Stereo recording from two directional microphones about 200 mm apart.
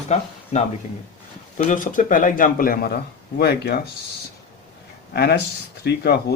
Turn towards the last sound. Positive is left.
turn(degrees=55)  # may be behind; listen again after turning